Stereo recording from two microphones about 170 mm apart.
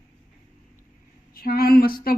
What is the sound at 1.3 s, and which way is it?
Speech, 60° left (ahead or behind).